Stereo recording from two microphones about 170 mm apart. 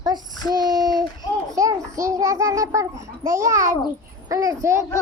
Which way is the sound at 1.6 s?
20° right (ahead or behind).